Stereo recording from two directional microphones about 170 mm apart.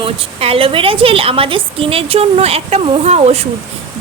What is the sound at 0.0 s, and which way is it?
A woman's voice, 35° right (ahead or behind).